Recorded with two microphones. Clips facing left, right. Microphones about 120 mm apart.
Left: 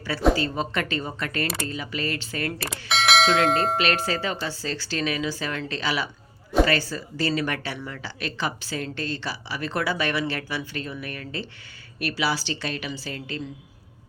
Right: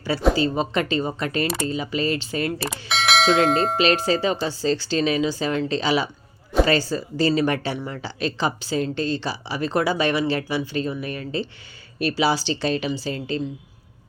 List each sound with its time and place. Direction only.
0.3 s a woman's voice: 20° right (ahead or behind)
2.6 s bell: centre (ahead or behind)
3.8 s a woman's voice: 25° right (ahead or behind)